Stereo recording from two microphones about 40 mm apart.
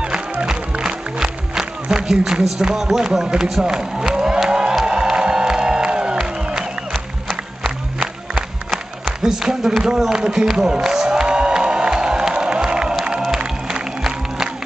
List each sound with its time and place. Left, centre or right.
0.0 s music: centre
2.7 s speech: centre
3.6 s crowd: centre
4.4 s music: centre
6.9 s crowd: centre
8.0 s music: centre
10.5 s speech: centre
11.1 s crowd: right
13.7 s music: centre